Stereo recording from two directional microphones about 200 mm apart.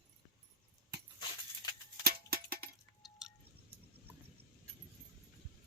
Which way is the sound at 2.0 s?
50° right (ahead or behind).